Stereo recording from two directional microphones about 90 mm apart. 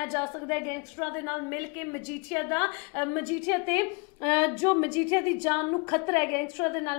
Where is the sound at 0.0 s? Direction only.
20° left (ahead or behind).